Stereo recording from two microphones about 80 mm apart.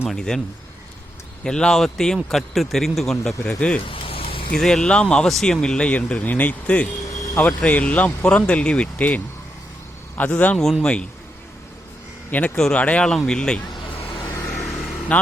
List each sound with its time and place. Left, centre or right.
0.1 s speech: centre
1.5 s speech: centre
3.8 s a sound: left
4.5 s a man's voice: centre
10.6 s speech: centre
12.3 s a man's voice: left
14.3 s vehicle: left
14.6 s vehicle: centre